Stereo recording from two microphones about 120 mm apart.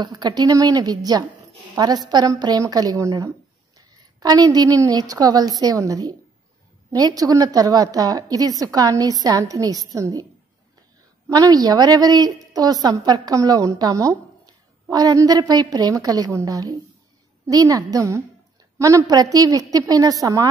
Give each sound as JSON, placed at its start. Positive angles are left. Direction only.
{"t": 0.0, "sound": "a woman's voice", "side_deg": -35}
{"t": 11.2, "sound": "a woman's voice", "side_deg": -30}